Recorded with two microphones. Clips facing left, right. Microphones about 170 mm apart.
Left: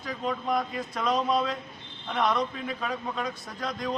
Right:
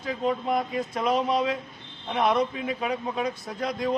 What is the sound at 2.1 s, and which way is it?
A man's voice, 20° right (ahead or behind).